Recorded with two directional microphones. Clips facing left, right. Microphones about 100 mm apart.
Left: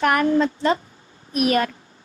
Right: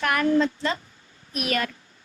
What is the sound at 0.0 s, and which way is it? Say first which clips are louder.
A woman's voice: left 3 dB; 30° left (ahead or behind).